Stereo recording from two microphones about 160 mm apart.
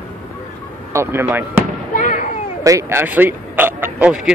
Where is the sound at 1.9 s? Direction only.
55° left (ahead or behind).